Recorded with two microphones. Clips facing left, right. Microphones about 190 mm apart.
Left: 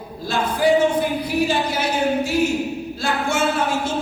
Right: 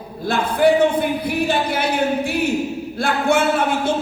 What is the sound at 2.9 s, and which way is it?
Speech, 55° right (ahead or behind).